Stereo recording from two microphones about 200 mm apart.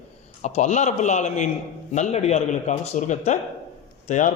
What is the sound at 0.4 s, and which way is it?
A man's voice, 35° left (ahead or behind).